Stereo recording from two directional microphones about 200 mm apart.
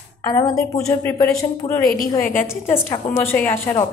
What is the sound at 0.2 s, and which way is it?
A woman's voice, 15° left (ahead or behind).